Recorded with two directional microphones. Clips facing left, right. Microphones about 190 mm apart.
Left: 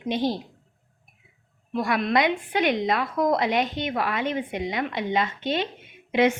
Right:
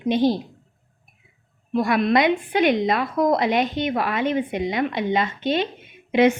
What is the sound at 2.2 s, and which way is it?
Speech, 15° right (ahead or behind).